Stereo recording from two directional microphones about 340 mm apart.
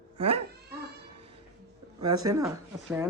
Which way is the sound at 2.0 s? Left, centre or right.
Centre.